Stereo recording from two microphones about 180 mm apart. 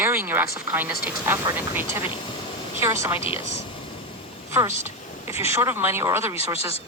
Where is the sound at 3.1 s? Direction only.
30° left (ahead or behind).